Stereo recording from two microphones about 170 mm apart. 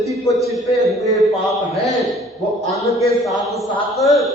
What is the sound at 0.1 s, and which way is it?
Speech, 20° right (ahead or behind).